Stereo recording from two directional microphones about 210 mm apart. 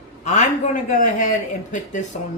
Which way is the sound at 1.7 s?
35° left (ahead or behind).